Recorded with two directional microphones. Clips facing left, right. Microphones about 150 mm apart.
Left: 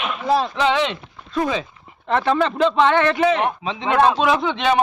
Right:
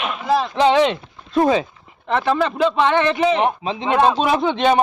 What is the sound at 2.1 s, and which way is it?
A man's voice, 5° right (ahead or behind).